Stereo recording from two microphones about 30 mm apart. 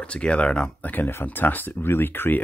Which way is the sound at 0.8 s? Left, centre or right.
Left.